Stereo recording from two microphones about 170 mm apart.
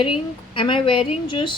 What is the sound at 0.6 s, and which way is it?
A woman's voice, 30° left (ahead or behind).